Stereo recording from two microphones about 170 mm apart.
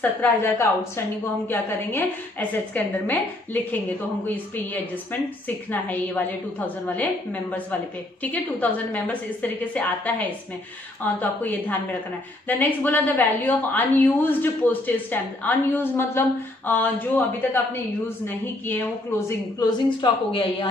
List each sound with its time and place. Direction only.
0.0 s a woman's voice: 10° left (ahead or behind)
5.7 s a woman's voice: 10° left (ahead or behind)
8.2 s a woman's voice: 10° left (ahead or behind)
18.0 s a woman's voice: 15° left (ahead or behind)
19.6 s speech: 30° left (ahead or behind)